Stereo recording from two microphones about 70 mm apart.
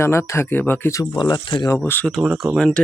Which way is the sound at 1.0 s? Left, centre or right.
Left.